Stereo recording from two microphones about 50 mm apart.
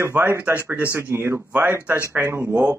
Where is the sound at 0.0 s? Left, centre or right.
Right.